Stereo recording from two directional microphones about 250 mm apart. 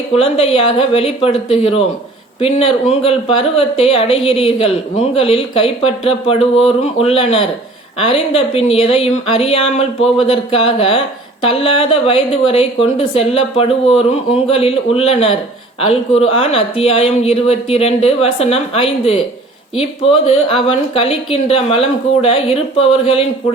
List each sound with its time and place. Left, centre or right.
0.1 s speech: left